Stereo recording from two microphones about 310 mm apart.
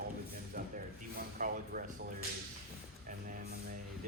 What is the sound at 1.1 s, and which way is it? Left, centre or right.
Speech, right.